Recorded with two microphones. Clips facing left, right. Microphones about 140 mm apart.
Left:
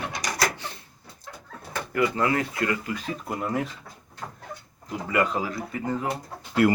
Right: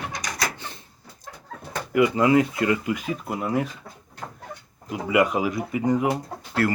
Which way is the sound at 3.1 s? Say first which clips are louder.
Right 2 dB; 5° right (ahead or behind).